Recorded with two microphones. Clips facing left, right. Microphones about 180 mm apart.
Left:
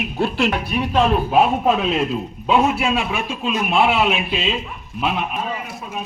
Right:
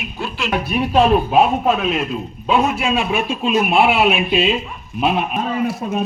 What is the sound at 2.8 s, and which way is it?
A man's voice, 20° right (ahead or behind).